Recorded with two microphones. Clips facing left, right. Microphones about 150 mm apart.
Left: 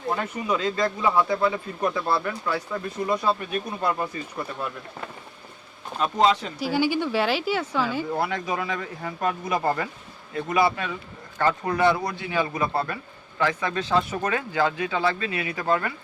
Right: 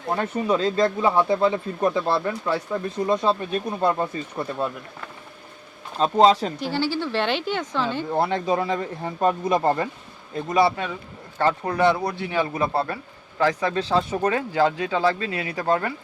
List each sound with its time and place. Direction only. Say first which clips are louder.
0.2 s speech: right 4 dB; 30° right (ahead or behind)
6.0 s speech: right 4 dB; 35° right (ahead or behind)
6.6 s speech: left 1 dB; 10° left (ahead or behind)
8.1 s speech: right 4 dB; 25° right (ahead or behind)
13.4 s speech: right 3 dB; 35° right (ahead or behind)